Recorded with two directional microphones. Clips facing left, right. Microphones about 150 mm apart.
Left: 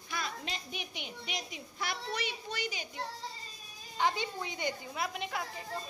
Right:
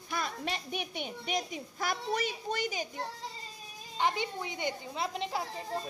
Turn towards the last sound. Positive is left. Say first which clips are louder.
# right 2 dB
turn(degrees=-30)  # may be behind; listen again after turning